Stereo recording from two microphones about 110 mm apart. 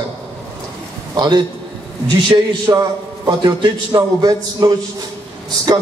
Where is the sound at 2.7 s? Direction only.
35° right (ahead or behind).